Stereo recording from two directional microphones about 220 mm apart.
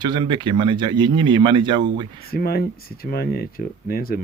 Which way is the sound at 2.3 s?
45° left (ahead or behind).